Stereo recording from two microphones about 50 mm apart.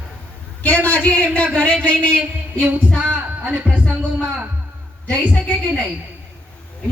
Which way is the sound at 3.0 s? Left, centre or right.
Right.